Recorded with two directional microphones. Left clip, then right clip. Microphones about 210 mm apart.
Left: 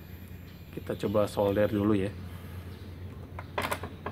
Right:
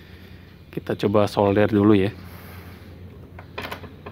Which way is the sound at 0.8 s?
50° right (ahead or behind).